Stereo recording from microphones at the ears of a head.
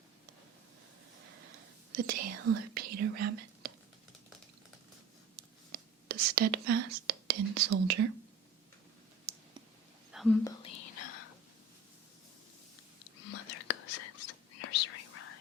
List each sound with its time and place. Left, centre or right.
1.2 s whispering: right
5.4 s whispering: right
10.6 s whispering: left
13.1 s whispering: left